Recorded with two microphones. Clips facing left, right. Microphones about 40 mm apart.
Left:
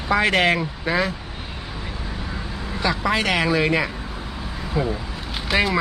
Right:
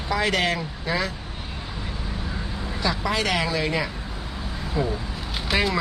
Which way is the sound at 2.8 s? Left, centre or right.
Left.